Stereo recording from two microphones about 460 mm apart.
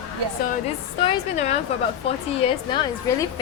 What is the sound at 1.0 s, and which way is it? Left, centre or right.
A woman's voice, centre.